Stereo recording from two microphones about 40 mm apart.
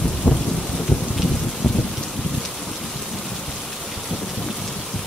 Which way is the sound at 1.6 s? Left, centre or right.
Centre.